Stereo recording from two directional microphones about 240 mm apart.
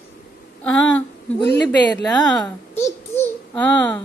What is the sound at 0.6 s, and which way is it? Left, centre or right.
A woman's voice, centre.